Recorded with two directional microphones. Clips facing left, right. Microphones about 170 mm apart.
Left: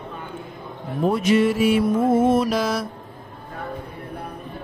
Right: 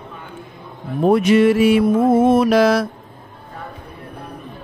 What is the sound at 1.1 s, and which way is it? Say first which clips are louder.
Mantra: right 6 dB; 65° right (ahead or behind).